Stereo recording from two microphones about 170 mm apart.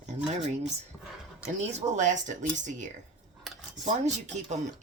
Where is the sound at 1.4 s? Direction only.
45° right (ahead or behind).